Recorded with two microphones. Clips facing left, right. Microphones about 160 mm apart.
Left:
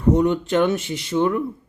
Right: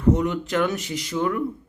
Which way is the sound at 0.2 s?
30° left (ahead or behind).